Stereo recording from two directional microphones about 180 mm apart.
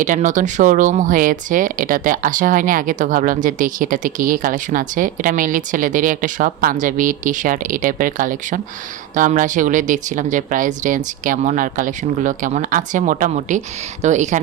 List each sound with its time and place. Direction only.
0.0 s speech: 45° right (ahead or behind)